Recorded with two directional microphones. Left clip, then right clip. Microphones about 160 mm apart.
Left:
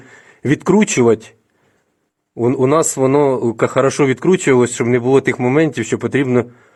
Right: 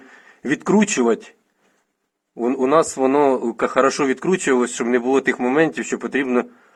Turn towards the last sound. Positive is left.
turn(degrees=20)  # may be behind; listen again after turning